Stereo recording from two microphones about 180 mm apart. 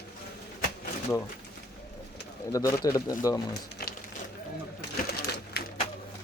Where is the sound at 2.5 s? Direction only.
15° left (ahead or behind).